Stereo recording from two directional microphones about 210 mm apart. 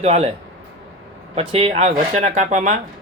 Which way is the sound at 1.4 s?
30° right (ahead or behind).